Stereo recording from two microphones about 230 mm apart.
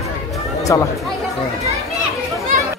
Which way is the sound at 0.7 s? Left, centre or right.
Centre.